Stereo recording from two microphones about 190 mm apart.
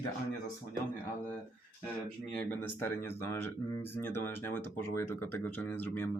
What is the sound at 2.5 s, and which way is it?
Speech, 10° left (ahead or behind).